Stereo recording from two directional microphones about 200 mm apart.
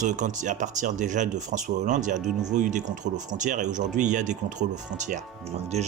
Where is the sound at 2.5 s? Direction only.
40° right (ahead or behind).